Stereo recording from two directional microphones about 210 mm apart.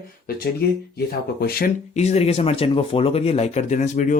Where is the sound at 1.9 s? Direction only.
30° left (ahead or behind).